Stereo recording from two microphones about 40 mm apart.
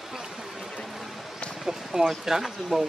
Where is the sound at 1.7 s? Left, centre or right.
Centre.